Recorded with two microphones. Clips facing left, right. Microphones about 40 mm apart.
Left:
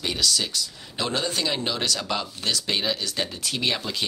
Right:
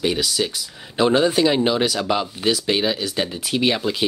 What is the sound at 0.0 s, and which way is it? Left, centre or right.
Speech, centre.